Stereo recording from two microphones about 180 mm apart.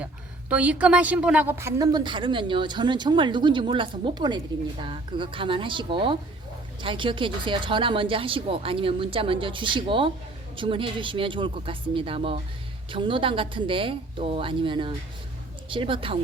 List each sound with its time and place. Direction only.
0.0 s a woman's voice: 10° right (ahead or behind); by 16.1 s 30° right (ahead or behind)